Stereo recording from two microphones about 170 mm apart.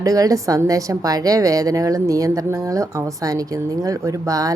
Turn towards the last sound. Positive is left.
turn(degrees=-20)  # may be behind; listen again after turning